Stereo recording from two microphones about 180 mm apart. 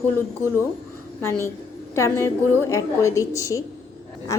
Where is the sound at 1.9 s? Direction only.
15° left (ahead or behind).